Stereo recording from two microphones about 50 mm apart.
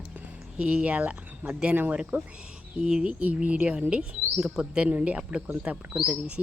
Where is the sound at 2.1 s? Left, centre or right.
Right.